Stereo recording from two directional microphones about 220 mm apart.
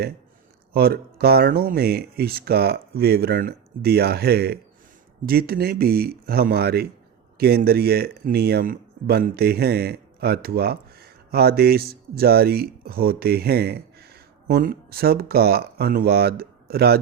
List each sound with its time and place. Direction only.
0.7 s speech: 45° right (ahead or behind)